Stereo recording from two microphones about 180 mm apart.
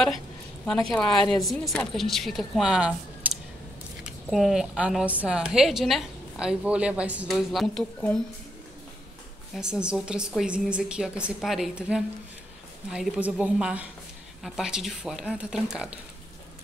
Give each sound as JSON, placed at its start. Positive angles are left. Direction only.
{"t": 0.7, "sound": "a woman's voice", "side_deg": 5}
{"t": 9.6, "sound": "a woman's voice", "side_deg": -5}